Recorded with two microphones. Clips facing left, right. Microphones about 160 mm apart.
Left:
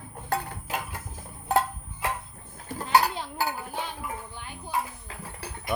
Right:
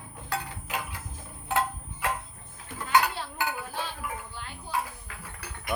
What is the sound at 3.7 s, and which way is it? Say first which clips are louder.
Music: left 1 dB; 15° left (ahead or behind).